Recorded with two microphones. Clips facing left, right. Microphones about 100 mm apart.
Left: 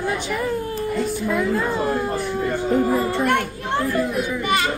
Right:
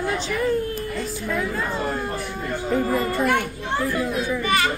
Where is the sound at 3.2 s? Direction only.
Centre (ahead or behind).